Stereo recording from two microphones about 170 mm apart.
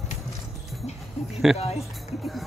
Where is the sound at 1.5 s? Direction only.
40° left (ahead or behind).